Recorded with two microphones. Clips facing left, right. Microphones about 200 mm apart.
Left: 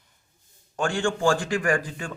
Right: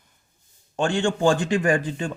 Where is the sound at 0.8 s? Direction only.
20° right (ahead or behind).